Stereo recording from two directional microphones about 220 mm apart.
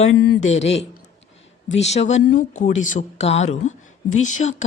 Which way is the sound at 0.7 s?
50° left (ahead or behind).